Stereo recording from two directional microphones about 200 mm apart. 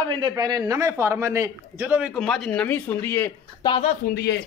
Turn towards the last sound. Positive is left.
turn(degrees=55)  # may be behind; listen again after turning